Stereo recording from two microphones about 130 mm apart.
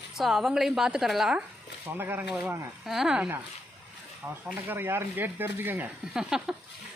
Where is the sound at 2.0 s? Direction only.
15° right (ahead or behind).